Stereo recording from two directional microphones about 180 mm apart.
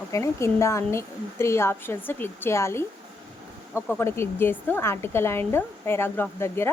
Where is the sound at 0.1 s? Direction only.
15° left (ahead or behind).